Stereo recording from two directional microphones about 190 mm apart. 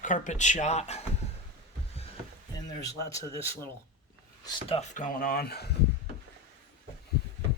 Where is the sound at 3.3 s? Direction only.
15° left (ahead or behind).